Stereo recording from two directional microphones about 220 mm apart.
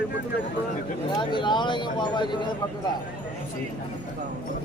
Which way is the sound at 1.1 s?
20° left (ahead or behind).